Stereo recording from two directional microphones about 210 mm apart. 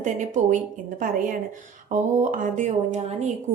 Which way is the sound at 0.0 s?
35° right (ahead or behind).